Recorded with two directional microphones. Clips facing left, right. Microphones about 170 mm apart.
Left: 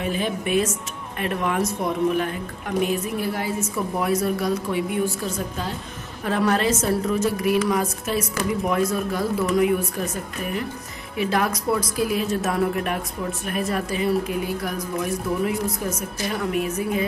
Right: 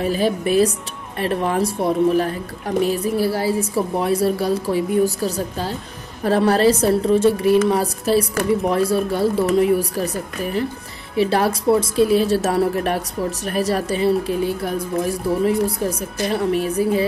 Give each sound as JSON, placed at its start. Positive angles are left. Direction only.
{"t": 0.0, "sound": "a woman's voice", "side_deg": -35}